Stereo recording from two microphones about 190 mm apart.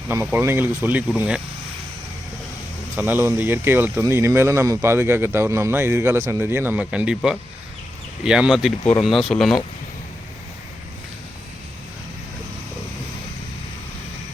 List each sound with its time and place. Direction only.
0.1 s speech: 10° right (ahead or behind)
2.9 s speech: 10° right (ahead or behind)